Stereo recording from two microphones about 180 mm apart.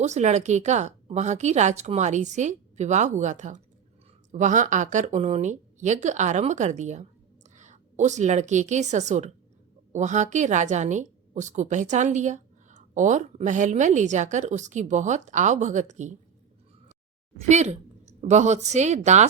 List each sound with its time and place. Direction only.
0.0 s a woman's voice: 40° right (ahead or behind)
17.5 s a woman's voice: 40° right (ahead or behind)